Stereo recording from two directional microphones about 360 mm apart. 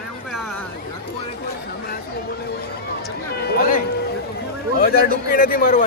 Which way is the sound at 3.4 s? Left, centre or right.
Left.